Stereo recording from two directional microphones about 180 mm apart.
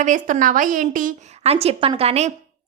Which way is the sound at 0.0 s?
45° right (ahead or behind).